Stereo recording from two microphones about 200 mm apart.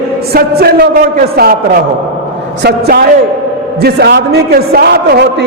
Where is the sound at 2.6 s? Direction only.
55° right (ahead or behind).